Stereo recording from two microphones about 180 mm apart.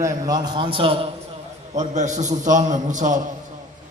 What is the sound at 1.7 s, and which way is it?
A man's voice, 40° right (ahead or behind).